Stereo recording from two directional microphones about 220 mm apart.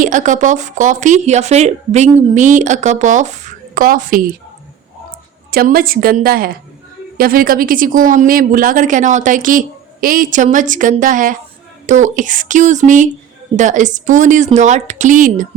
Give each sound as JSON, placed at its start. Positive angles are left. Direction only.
{"t": 0.0, "sound": "speech", "side_deg": -35}
{"t": 5.5, "sound": "speech", "side_deg": -40}